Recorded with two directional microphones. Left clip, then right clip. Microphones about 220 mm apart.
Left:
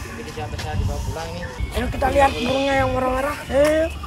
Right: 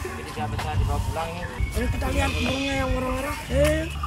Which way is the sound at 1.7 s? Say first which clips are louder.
Left 10 dB; 5° right (ahead or behind).